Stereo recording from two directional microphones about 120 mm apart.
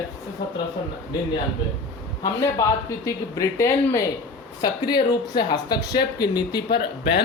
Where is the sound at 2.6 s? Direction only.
25° left (ahead or behind).